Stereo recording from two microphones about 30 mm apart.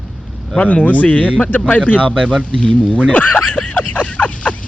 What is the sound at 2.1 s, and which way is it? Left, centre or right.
Speech, centre.